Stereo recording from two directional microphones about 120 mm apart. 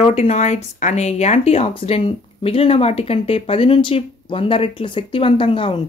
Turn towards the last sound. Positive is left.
turn(degrees=45)  # may be behind; listen again after turning